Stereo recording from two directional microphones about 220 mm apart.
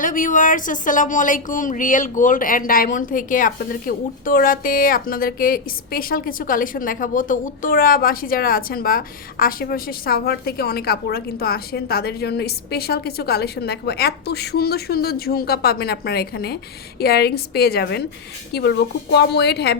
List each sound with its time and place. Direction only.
0.0 s a woman's voice: 35° left (ahead or behind)